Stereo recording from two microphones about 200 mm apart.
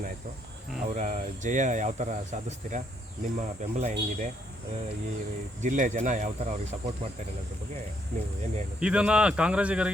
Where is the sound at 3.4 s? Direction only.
35° right (ahead or behind).